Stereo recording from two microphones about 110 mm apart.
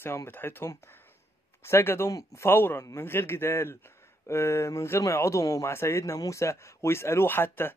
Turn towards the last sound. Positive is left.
turn(degrees=20)  # may be behind; listen again after turning